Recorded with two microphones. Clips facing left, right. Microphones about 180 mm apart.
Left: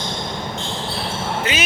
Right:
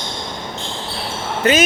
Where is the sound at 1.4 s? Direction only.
45° right (ahead or behind).